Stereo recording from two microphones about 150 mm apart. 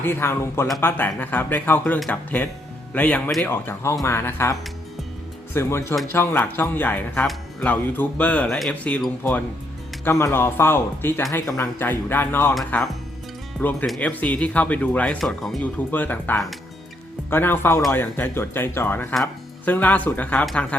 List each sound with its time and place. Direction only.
0.0 s speech: 15° left (ahead or behind)
5.5 s speech: 15° left (ahead or behind)
13.6 s speech: 10° left (ahead or behind)